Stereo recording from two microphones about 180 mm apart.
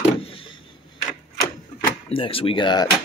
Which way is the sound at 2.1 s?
30° left (ahead or behind).